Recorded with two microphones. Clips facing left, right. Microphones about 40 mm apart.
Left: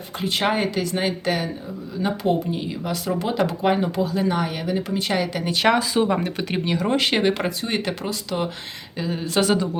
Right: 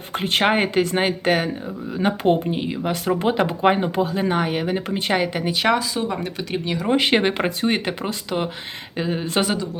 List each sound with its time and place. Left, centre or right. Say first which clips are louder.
0.2 s speech: right 3 dB; right
5.6 s speech: left 3 dB; centre
6.9 s speech: right 3 dB; centre